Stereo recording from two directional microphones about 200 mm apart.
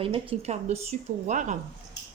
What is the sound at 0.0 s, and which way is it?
A woman's voice, 25° right (ahead or behind).